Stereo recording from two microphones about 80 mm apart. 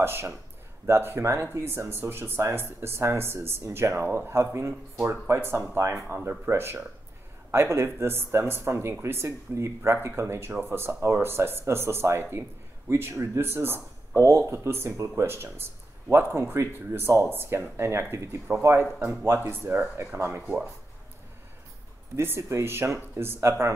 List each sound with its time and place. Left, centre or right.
0.0 s speech: right
22.1 s speech: right